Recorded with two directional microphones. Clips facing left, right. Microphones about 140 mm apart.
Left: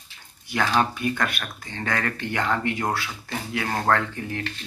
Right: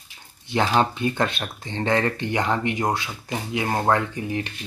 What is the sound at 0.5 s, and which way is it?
Speech, 25° right (ahead or behind).